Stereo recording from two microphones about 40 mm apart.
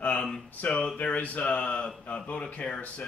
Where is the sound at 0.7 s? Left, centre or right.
Left.